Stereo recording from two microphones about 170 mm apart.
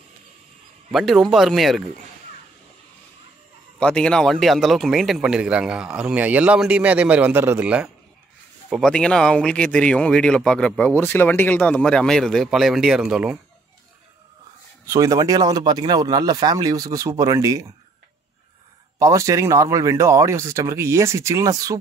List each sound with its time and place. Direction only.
0.9 s speech: centre (ahead or behind)
3.8 s speech: 5° left (ahead or behind)
14.9 s speech: 20° right (ahead or behind)
18.9 s speech: 20° right (ahead or behind)